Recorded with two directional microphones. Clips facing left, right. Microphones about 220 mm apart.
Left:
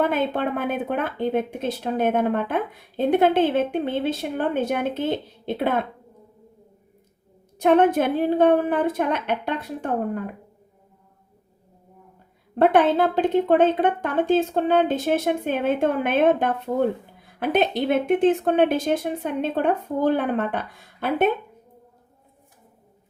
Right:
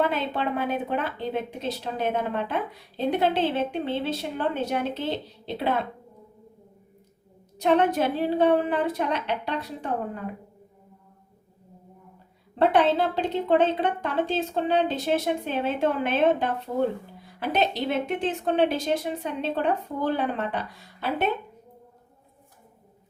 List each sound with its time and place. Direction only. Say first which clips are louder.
0.0 s speech: left 4 dB; 50° left (ahead or behind)
7.6 s speech: left 4 dB; 50° left (ahead or behind)
12.5 s speech: left 3 dB; 50° left (ahead or behind)